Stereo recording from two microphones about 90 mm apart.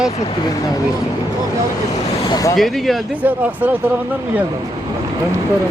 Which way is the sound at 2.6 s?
Centre (ahead or behind).